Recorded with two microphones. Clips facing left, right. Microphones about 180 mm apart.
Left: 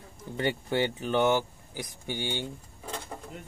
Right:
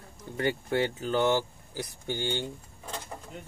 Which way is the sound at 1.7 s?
15° left (ahead or behind).